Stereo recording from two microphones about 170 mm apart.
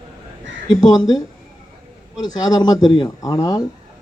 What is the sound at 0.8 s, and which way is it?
Speech, 25° left (ahead or behind).